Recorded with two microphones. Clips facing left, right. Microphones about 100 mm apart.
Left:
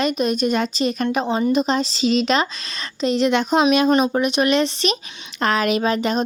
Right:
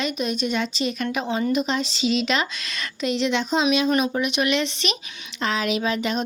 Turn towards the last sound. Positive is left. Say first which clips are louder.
# left 4 dB
turn(degrees=40)  # may be behind; listen again after turning